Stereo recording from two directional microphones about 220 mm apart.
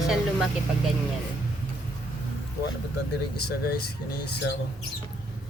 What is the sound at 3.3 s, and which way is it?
Speech, 45° left (ahead or behind).